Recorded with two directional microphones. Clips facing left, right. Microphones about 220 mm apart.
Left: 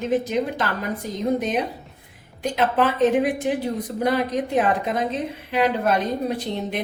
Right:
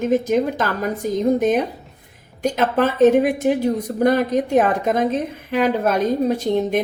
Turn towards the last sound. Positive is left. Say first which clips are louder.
# right 7 dB
turn(degrees=-45)  # may be behind; listen again after turning